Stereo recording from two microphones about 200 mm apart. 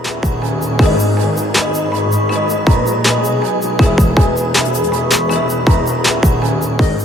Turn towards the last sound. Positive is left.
turn(degrees=0)  # may be behind; listen again after turning